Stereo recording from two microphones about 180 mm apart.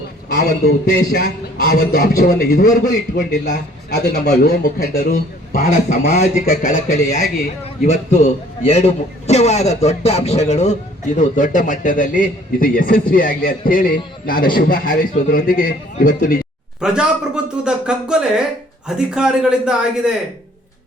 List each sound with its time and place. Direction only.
0.6 s a man's voice: 65° left (ahead or behind); by 16.4 s 50° left (ahead or behind)
16.8 s speech: 5° right (ahead or behind)